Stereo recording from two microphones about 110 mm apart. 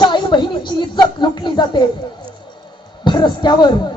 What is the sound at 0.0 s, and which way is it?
Speech, 45° left (ahead or behind).